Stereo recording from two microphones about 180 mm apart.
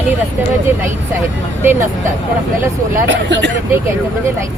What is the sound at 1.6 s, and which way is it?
Speech, 10° right (ahead or behind).